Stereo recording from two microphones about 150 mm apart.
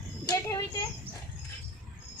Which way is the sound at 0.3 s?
20° left (ahead or behind).